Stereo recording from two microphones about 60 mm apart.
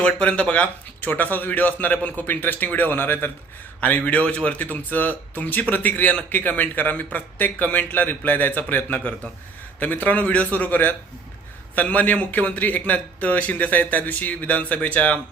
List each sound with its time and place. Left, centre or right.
0.0 s speech: centre; by 3.3 s left
3.8 s speech: left